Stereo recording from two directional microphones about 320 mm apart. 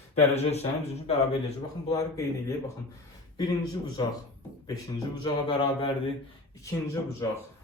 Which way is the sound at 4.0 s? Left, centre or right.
Centre.